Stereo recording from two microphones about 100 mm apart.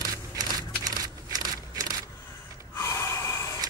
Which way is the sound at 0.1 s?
35° right (ahead or behind).